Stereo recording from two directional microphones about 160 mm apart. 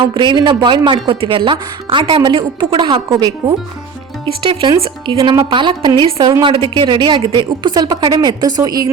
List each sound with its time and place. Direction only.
0.0 s speech: 30° right (ahead or behind)